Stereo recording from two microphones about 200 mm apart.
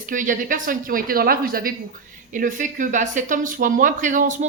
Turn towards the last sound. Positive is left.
turn(degrees=-40)  # may be behind; listen again after turning